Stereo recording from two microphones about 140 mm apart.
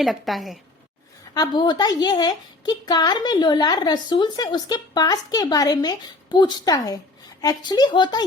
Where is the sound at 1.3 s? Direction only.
30° left (ahead or behind).